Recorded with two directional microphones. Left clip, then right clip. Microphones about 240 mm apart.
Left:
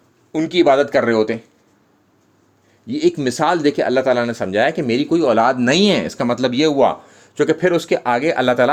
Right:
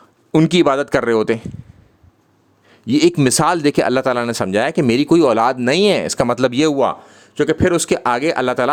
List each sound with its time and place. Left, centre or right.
0.3 s speech: right
2.8 s speech: right